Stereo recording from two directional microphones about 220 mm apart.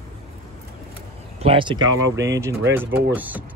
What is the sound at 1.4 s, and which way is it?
Speech, 25° right (ahead or behind).